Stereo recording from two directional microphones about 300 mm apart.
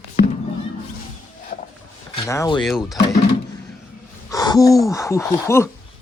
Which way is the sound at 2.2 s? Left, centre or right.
Centre.